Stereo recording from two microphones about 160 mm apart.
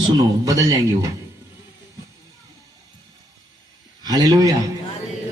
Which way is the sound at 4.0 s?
25° right (ahead or behind).